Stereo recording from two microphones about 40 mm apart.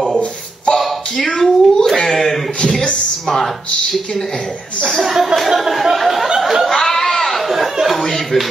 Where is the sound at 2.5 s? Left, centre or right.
Left.